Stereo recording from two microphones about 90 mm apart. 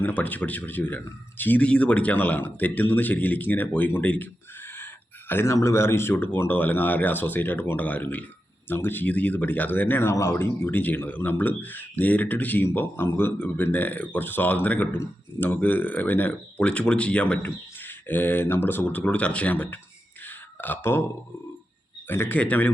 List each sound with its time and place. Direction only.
0.0 s speech: 20° left (ahead or behind)
5.3 s speech: 25° left (ahead or behind)
20.2 s a sound: 20° left (ahead or behind)
22.0 s speech: 25° left (ahead or behind)